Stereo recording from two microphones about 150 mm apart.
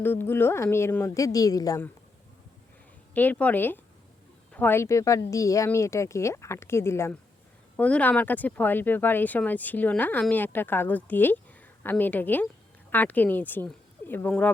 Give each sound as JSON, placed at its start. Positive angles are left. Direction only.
{"t": 0.0, "sound": "speech", "side_deg": 15}
{"t": 3.2, "sound": "speech", "side_deg": 10}